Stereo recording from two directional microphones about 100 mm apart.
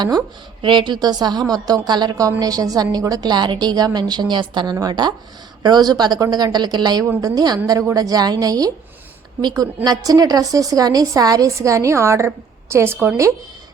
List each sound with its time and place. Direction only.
0.6 s a woman's voice: 55° right (ahead or behind); by 13.1 s 20° right (ahead or behind)